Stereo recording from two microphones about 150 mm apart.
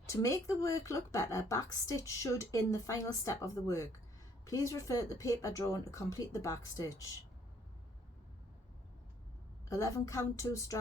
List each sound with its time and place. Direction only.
0.0 s speech: 20° left (ahead or behind)
9.6 s speech: 20° left (ahead or behind)